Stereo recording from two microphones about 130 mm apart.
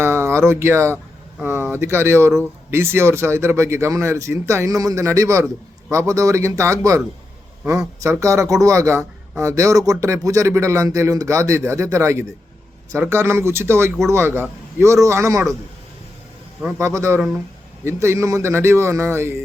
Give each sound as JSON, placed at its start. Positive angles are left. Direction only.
{"t": 0.0, "sound": "a man's voice", "side_deg": -20}
{"t": 8.0, "sound": "a man's voice", "side_deg": -25}
{"t": 16.7, "sound": "a man's voice", "side_deg": -20}